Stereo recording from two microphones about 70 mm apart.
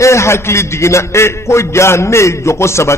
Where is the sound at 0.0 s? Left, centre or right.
Left.